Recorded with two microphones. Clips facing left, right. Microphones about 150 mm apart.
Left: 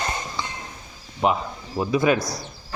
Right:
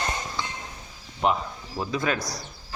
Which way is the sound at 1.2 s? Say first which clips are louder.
Left 2 dB; 5° left (ahead or behind).